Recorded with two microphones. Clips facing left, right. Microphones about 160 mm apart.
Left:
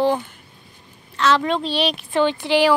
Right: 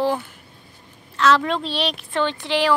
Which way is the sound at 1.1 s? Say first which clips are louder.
Even; centre (ahead or behind).